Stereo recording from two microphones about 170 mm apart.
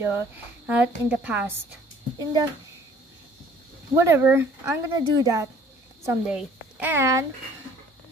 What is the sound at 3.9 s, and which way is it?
Speech, 15° right (ahead or behind).